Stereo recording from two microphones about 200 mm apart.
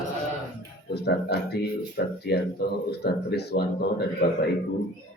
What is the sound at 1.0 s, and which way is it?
Speech, 55° left (ahead or behind).